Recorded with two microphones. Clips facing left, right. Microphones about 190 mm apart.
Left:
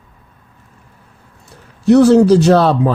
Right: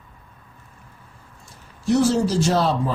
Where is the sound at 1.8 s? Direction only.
65° left (ahead or behind).